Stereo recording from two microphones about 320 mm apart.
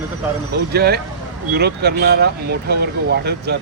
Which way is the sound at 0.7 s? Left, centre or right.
Right.